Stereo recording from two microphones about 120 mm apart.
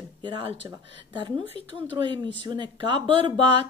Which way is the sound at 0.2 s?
45° right (ahead or behind).